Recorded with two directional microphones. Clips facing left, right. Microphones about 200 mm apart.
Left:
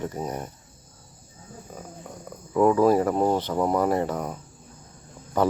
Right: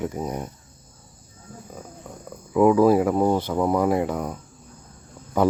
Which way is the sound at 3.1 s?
5° left (ahead or behind).